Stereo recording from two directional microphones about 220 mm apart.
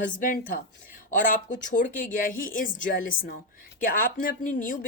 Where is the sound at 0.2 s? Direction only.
40° left (ahead or behind).